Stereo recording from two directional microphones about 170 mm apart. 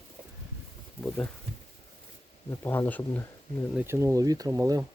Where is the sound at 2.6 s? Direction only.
10° left (ahead or behind).